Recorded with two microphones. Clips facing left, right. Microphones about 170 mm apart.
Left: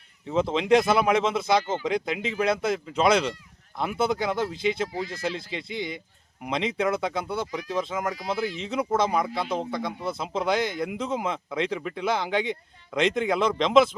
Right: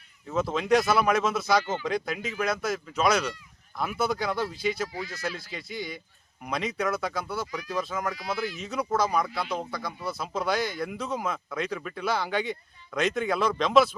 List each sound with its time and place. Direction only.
0.3 s speech: 20° left (ahead or behind)